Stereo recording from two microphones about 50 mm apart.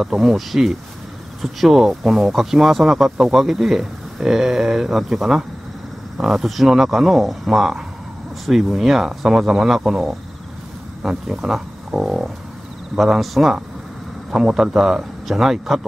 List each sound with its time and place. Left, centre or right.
0.0 s speech: centre
14.6 s speech: centre